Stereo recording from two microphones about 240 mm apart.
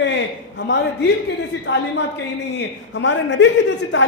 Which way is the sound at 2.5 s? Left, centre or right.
Left.